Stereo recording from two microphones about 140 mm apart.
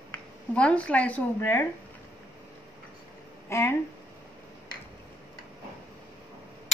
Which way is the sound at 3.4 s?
20° left (ahead or behind).